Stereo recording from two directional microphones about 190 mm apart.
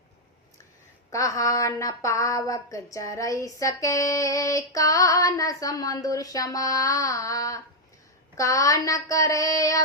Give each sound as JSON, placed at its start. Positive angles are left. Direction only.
{"t": 1.1, "sound": "speech", "side_deg": 15}